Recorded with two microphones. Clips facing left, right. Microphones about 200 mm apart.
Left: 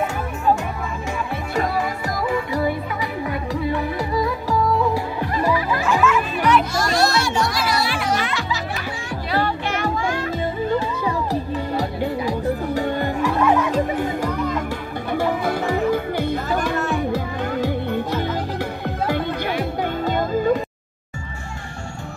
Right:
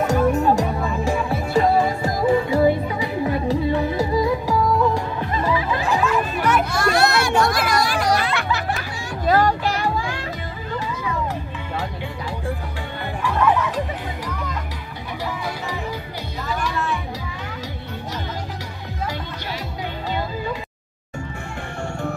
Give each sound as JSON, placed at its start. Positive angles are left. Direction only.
{"t": 0.0, "sound": "music", "side_deg": -40}
{"t": 5.9, "sound": "music", "side_deg": -35}
{"t": 8.4, "sound": "music", "side_deg": -60}
{"t": 12.0, "sound": "music", "side_deg": 40}